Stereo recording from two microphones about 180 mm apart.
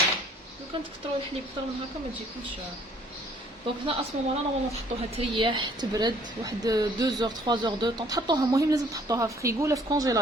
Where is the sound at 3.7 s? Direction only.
30° right (ahead or behind).